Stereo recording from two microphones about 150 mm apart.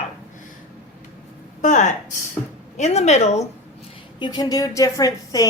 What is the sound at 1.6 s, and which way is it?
A woman's voice, 55° left (ahead or behind).